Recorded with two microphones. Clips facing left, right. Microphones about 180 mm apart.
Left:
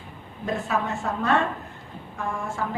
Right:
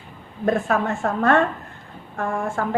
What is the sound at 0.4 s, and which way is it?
A woman's voice, 55° right (ahead or behind).